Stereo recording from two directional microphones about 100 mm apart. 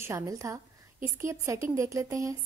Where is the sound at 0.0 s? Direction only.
30° right (ahead or behind).